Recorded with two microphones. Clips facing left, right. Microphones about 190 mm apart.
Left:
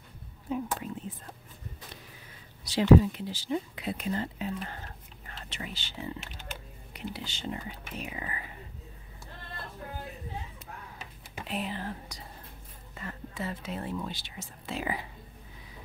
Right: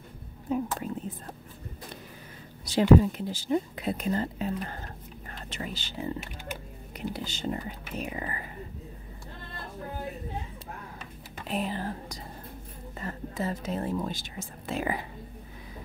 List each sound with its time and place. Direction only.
0.5 s speech: 45° right (ahead or behind)
2.6 s speech: 50° right (ahead or behind)
11.4 s a sound: 40° right (ahead or behind)
13.0 s speech: 40° right (ahead or behind)